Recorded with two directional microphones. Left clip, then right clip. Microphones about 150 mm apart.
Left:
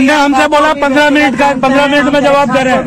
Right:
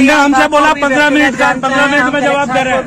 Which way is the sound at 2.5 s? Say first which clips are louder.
Left 2 dB; 55° left (ahead or behind).